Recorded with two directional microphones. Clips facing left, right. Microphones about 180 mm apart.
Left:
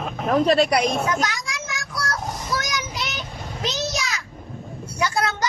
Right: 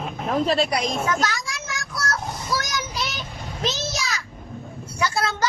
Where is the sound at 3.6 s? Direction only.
15° left (ahead or behind).